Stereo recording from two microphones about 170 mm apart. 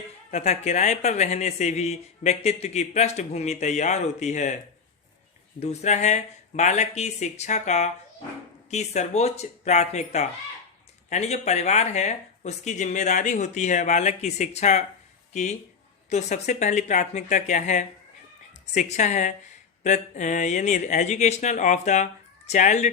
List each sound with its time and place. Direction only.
0.3 s speech: 40° left (ahead or behind)
5.5 s speech: 40° left (ahead or behind)